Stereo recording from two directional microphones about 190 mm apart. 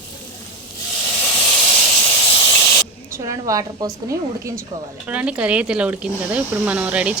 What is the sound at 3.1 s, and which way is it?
A woman's voice, 15° right (ahead or behind).